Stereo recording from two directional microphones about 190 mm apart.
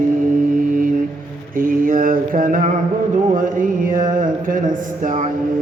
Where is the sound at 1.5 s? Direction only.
45° right (ahead or behind).